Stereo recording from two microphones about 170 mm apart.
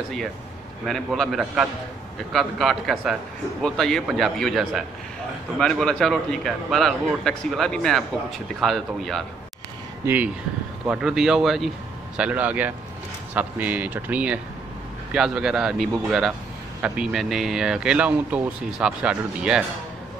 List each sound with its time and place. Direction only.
0.8 s speech: centre (ahead or behind)
10.0 s speech: 10° right (ahead or behind)